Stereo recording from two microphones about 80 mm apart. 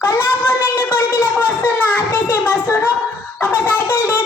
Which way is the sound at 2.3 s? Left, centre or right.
Left.